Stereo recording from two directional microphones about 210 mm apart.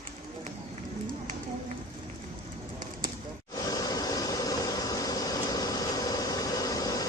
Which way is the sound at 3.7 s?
20° left (ahead or behind).